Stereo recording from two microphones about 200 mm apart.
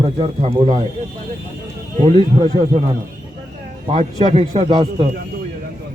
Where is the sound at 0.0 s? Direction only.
30° right (ahead or behind).